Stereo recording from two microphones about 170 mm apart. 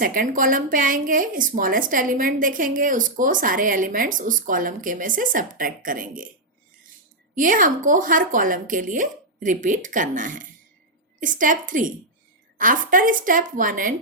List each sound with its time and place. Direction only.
0.0 s a woman's voice: 55° right (ahead or behind)
7.3 s a woman's voice: 50° right (ahead or behind)